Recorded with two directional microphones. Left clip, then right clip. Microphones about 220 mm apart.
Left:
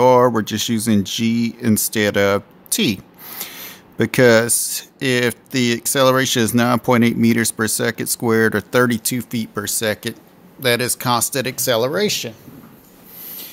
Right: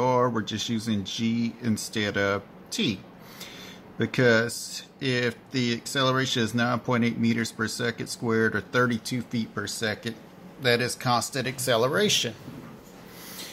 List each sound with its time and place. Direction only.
0.0 s speech: 50° left (ahead or behind); by 12.4 s 20° left (ahead or behind)